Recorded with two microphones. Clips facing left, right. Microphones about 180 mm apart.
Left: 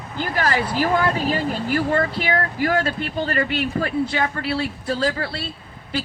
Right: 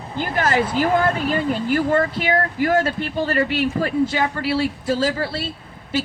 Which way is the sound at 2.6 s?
25° right (ahead or behind).